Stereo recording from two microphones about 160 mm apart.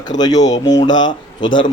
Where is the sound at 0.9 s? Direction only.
30° left (ahead or behind).